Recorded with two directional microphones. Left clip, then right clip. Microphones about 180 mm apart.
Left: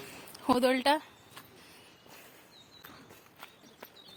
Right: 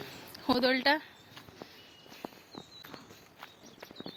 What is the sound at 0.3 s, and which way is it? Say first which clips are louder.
Speech: left 1 dB; 15° left (ahead or behind).